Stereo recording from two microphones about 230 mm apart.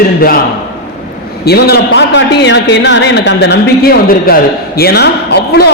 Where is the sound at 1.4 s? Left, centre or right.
Left.